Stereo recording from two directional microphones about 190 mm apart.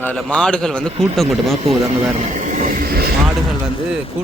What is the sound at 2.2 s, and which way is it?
Speech, 40° right (ahead or behind).